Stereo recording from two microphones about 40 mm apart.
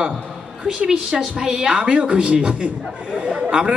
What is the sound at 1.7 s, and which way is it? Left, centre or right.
Speech, right.